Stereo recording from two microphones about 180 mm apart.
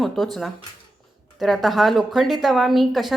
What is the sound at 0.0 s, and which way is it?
A woman's voice, centre (ahead or behind).